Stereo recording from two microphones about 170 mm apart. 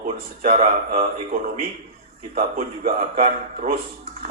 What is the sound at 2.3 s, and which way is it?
A man's voice, 40° right (ahead or behind).